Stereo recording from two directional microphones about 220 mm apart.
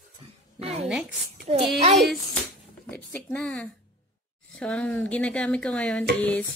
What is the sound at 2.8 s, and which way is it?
Speech, 5° left (ahead or behind).